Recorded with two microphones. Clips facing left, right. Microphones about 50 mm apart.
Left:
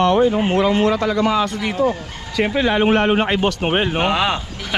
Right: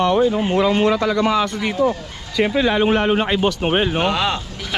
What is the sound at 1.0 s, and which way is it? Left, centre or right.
Speech, right.